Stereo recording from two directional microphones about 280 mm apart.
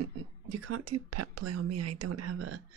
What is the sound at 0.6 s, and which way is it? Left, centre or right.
Speech, right.